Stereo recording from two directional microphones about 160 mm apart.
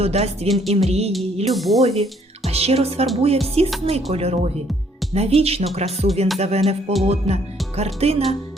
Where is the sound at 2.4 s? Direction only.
40° right (ahead or behind).